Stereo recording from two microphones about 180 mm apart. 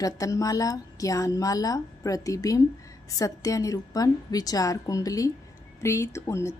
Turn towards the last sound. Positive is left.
turn(degrees=15)  # may be behind; listen again after turning